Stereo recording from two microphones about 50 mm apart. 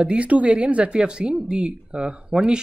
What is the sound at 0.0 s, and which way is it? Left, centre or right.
Speech, right.